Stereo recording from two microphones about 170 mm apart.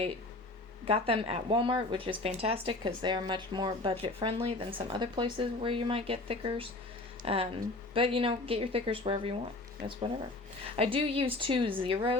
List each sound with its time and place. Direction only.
0.9 s speech: 35° right (ahead or behind)
10.8 s speech: 35° right (ahead or behind)